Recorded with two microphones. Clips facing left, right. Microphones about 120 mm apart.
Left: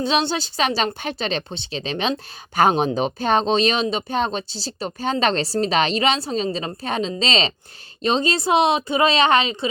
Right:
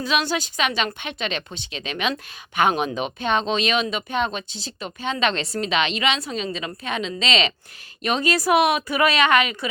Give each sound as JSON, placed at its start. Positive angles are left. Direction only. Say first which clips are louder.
{"t": 0.0, "sound": "a woman's voice", "louder": "left 2 dB", "side_deg": 30}